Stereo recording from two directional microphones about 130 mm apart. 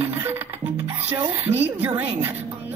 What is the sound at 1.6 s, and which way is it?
Speech, 15° right (ahead or behind).